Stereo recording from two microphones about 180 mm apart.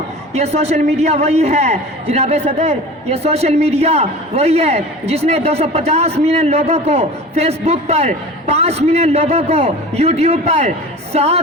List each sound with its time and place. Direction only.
0.3 s a man's voice: 35° right (ahead or behind)